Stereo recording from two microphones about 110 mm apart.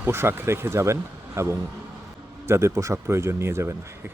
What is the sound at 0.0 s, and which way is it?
Speech, 20° right (ahead or behind).